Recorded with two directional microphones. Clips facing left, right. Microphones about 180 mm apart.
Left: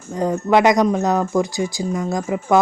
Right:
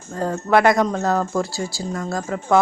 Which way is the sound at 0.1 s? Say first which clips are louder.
Left 2 dB; 15° left (ahead or behind).